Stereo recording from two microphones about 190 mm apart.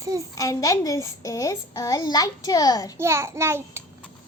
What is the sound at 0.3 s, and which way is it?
A child's voice, 15° left (ahead or behind).